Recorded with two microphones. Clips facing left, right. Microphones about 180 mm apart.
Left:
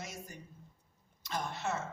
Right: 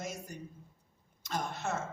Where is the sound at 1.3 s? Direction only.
50° right (ahead or behind).